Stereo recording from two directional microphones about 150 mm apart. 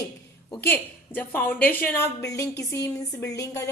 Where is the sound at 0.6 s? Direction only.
15° left (ahead or behind).